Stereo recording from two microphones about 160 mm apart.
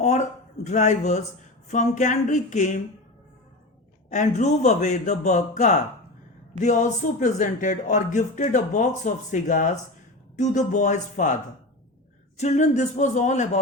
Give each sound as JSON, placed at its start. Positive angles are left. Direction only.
{"t": 0.0, "sound": "a sound", "side_deg": 45}
{"t": 1.6, "sound": "speech", "side_deg": 50}
{"t": 4.1, "sound": "speech", "side_deg": 50}
{"t": 12.4, "sound": "speech", "side_deg": 45}